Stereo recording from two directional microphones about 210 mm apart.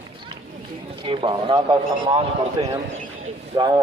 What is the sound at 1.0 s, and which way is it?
A man's voice, 25° right (ahead or behind).